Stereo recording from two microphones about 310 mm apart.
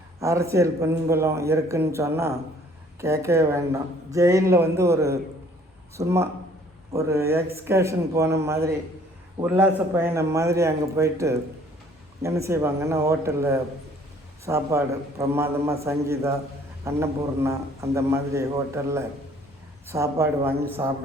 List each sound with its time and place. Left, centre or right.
0.2 s a man's voice: centre